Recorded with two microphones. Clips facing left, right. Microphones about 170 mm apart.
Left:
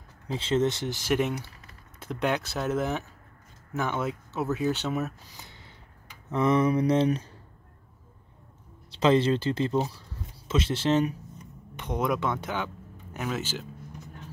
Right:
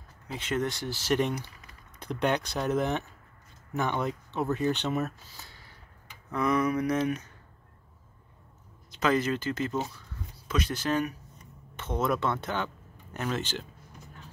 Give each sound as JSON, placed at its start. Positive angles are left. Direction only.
{"t": 0.3, "sound": "speech", "side_deg": 25}
{"t": 5.3, "sound": "a sound", "side_deg": 20}
{"t": 6.3, "sound": "speech", "side_deg": 25}
{"t": 8.9, "sound": "speech", "side_deg": 30}
{"t": 11.7, "sound": "speech", "side_deg": 15}